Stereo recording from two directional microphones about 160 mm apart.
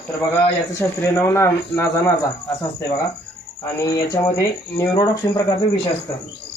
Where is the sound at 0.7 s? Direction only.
15° left (ahead or behind).